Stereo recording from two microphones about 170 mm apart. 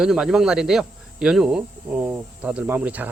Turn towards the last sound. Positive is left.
turn(degrees=-10)  # may be behind; listen again after turning